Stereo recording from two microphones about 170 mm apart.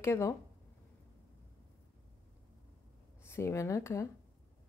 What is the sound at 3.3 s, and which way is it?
Speech, 15° left (ahead or behind).